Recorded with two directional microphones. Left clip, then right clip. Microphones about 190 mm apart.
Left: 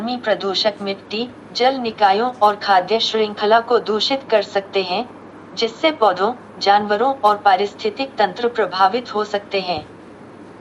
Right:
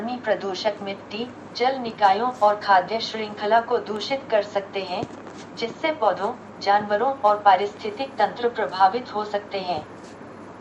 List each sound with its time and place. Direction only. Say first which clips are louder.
0.0 s a woman's voice: left 5 dB; 45° left (ahead or behind)